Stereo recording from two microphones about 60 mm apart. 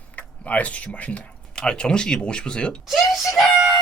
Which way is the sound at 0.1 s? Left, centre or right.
Left.